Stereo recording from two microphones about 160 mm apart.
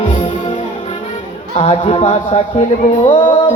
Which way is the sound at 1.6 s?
35° left (ahead or behind).